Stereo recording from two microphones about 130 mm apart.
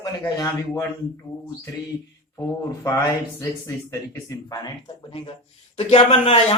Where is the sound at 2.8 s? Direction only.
25° left (ahead or behind).